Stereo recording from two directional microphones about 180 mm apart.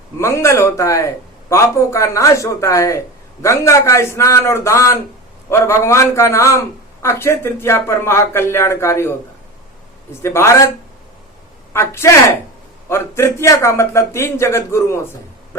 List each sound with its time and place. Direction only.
0.2 s a man's voice: 15° left (ahead or behind)
11.7 s a man's voice: 15° left (ahead or behind)